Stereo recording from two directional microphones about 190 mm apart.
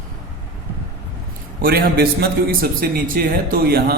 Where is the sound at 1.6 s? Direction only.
50° right (ahead or behind).